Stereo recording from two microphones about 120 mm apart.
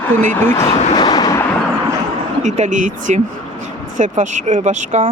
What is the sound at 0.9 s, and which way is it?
Train, 35° left (ahead or behind).